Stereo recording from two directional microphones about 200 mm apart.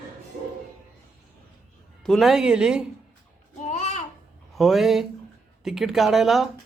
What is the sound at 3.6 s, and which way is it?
Babbling, 35° left (ahead or behind).